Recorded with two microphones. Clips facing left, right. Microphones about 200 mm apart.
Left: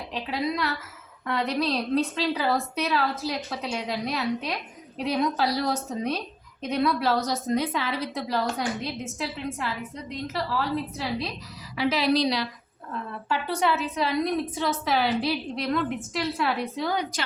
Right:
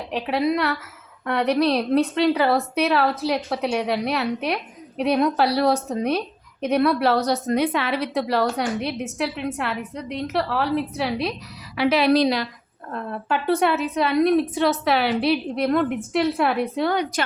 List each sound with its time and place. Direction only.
0.1 s a woman's voice: 65° right (ahead or behind)